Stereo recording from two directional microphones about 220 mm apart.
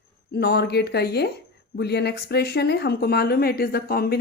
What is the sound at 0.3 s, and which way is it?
Speech, 45° left (ahead or behind).